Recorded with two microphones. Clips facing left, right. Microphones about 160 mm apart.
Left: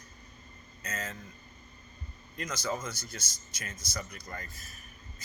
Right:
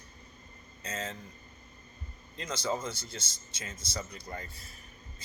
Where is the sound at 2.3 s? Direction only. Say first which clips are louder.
Right 1 dB; 25° right (ahead or behind).